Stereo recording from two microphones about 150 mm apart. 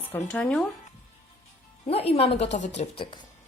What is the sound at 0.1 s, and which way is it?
Speech, 10° left (ahead or behind).